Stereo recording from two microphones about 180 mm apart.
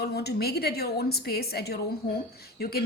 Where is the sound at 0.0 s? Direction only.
65° left (ahead or behind).